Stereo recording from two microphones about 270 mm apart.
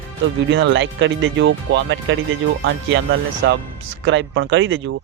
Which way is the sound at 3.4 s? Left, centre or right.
Right.